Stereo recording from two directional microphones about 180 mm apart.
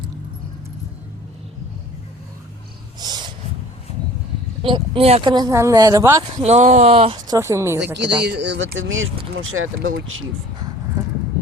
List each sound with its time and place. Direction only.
3.0 s snort: 25° right (ahead or behind)
4.6 s speech: 30° right (ahead or behind)
6.4 s speech: 40° right (ahead or behind)
7.3 s speech: 15° right (ahead or behind)
8.2 s speech: 70° right (ahead or behind); by 10.2 s 90° right